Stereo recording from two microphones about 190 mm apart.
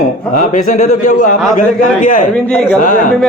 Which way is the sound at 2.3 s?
5° left (ahead or behind).